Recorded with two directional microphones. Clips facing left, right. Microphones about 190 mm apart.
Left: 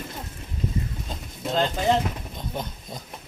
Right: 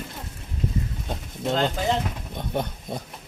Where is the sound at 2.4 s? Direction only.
60° right (ahead or behind).